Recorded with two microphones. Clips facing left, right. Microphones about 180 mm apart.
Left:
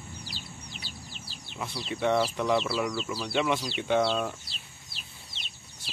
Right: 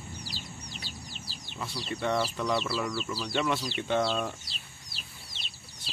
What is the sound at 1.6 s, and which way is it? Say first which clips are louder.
Speech: left 2 dB; 15° left (ahead or behind).